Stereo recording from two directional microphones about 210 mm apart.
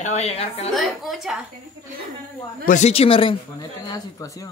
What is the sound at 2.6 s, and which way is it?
Speech, 35° left (ahead or behind).